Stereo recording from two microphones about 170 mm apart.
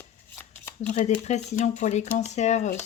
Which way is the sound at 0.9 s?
40° left (ahead or behind).